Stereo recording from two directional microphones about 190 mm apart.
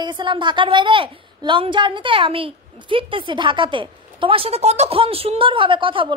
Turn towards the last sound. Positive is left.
turn(degrees=-25)  # may be behind; listen again after turning